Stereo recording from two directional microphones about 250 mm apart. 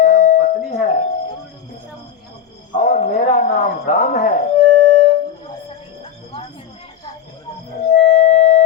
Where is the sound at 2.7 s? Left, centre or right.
Left.